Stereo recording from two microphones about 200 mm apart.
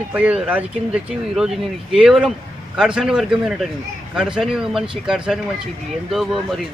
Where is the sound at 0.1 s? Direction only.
10° right (ahead or behind).